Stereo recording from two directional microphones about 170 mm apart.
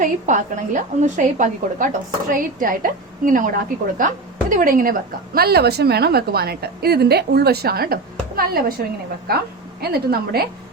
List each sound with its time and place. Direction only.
0.0 s a woman's voice: 50° right (ahead or behind)
9.8 s a woman's voice: 65° right (ahead or behind)